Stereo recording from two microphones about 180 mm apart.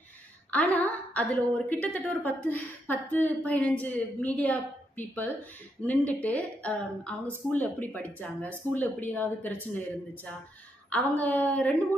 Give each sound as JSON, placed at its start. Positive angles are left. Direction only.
{"t": 0.5, "sound": "a woman's voice", "side_deg": 10}